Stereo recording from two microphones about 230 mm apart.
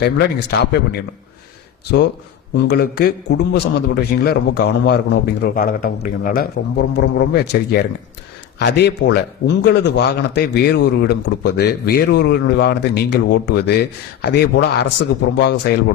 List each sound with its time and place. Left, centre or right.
0.0 s a man's voice: left
2.6 s a man's voice: left